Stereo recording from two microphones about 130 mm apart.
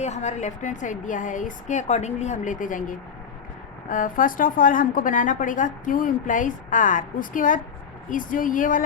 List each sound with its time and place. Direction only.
0.0 s a woman's voice: 60° left (ahead or behind); by 8.8 s 90° left